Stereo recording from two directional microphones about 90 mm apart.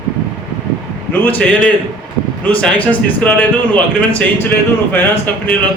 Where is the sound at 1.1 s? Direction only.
20° left (ahead or behind).